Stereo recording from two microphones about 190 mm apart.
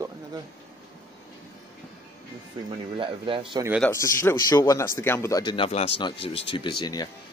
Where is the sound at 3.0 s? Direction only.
25° right (ahead or behind).